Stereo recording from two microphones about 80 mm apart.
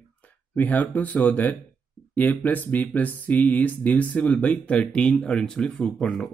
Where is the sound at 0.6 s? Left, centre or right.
Left.